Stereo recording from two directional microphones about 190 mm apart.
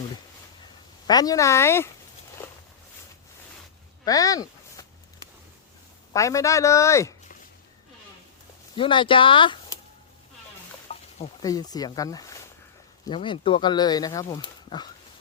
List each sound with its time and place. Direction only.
0.6 s speech: 20° left (ahead or behind)
4.0 s a sound: 20° left (ahead or behind)
6.1 s a man's voice: 15° left (ahead or behind)
8.7 s speech: 25° left (ahead or behind)
11.4 s speech: 20° left (ahead or behind)